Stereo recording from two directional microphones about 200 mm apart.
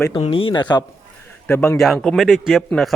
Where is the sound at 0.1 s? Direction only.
30° left (ahead or behind).